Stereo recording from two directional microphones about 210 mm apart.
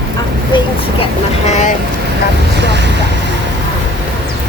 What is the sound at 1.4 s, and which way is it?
Vehicle, 35° left (ahead or behind).